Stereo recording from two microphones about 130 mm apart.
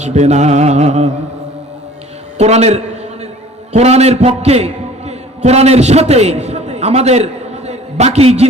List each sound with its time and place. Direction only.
0.0 s mantra: 60° right (ahead or behind)
2.4 s a sound: 60° right (ahead or behind)
3.7 s a man's voice: 55° right (ahead or behind)